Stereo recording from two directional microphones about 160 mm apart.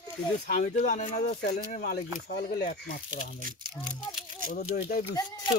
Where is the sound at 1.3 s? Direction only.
80° left.